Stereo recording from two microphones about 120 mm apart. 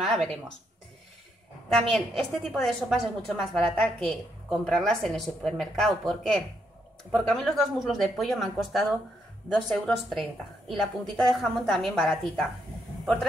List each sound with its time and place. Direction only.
0.0 s speech: centre (ahead or behind)
1.8 s a woman's voice: 5° left (ahead or behind)